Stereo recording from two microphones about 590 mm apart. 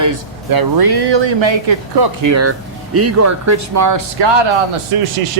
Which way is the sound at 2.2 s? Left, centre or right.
Right.